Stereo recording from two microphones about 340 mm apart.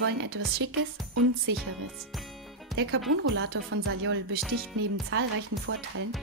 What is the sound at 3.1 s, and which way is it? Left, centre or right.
Speech, right.